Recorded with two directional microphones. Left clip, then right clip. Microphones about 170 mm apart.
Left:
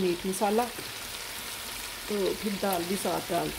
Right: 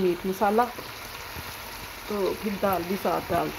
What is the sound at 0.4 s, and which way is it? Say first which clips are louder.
Speech: right 5 dB; 10° left (ahead or behind).